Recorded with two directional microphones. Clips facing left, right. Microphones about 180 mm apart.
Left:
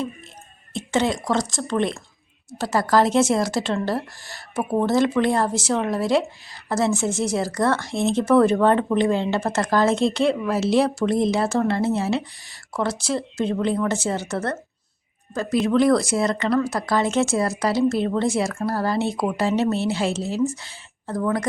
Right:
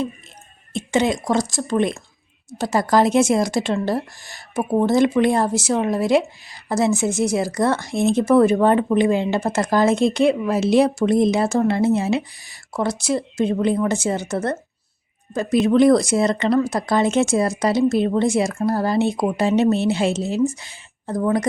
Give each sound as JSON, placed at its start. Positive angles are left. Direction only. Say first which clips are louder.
{"t": 0.7, "sound": "speech", "louder": "right 2 dB", "side_deg": -15}